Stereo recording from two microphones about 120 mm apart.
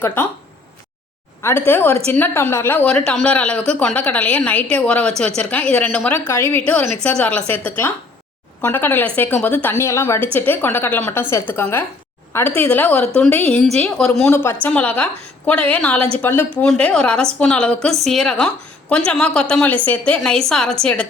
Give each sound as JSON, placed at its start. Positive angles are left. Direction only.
{"t": 0.0, "sound": "speech", "side_deg": 15}
{"t": 1.4, "sound": "speech", "side_deg": 20}
{"t": 7.0, "sound": "a woman's voice", "side_deg": 10}
{"t": 14.3, "sound": "a woman's voice", "side_deg": 20}
{"t": 16.0, "sound": "a woman's voice", "side_deg": -55}
{"t": 16.2, "sound": "a woman's voice", "side_deg": 15}